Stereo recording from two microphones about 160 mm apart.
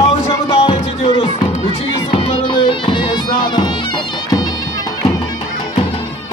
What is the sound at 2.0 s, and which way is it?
Music, 30° left (ahead or behind).